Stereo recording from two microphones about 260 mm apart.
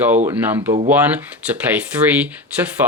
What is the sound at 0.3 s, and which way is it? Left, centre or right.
Speech, centre.